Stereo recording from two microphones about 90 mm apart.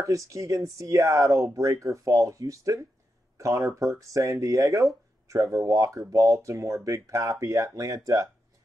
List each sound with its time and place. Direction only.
0.0 s speech: 35° right (ahead or behind)